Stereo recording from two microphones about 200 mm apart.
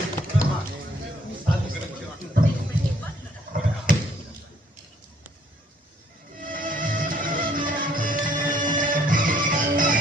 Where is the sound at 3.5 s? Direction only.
45° right (ahead or behind).